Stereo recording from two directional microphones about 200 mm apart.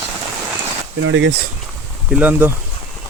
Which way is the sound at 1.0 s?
70° right (ahead or behind).